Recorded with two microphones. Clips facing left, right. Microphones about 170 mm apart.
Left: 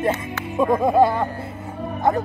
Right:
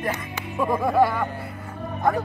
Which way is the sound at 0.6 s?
20° left (ahead or behind).